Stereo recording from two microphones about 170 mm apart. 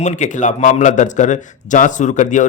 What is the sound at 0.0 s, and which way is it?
A man's voice, 45° left (ahead or behind).